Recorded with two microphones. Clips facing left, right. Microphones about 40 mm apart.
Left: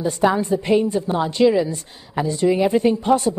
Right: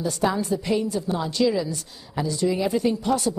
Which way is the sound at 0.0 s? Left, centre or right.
Left.